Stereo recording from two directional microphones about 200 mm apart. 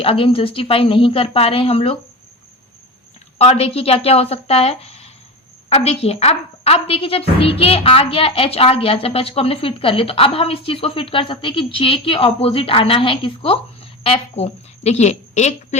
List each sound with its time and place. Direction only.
0.0 s a woman's voice: 30° left (ahead or behind)
3.3 s a woman's voice: 30° left (ahead or behind)